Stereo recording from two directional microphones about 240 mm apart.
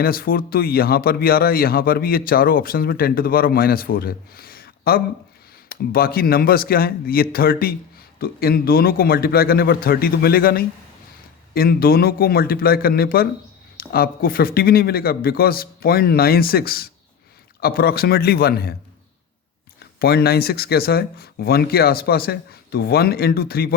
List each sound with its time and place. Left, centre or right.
0.0 s speech: left
19.8 s speech: left